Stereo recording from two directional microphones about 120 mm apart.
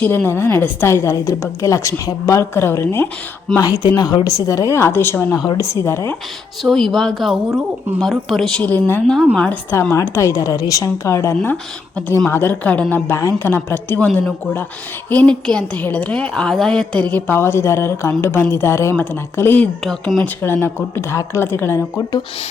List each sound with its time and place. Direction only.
0.0 s a woman's voice: 15° left (ahead or behind)
3.6 s a woman's voice: 30° left (ahead or behind)
5.4 s a woman's voice: 30° left (ahead or behind)
6.6 s a woman's voice: centre (ahead or behind)
9.9 s a woman's voice: 25° left (ahead or behind)
11.5 s a woman's voice: 10° left (ahead or behind)
19.8 s speech: centre (ahead or behind)
20.2 s a woman's voice: 20° left (ahead or behind)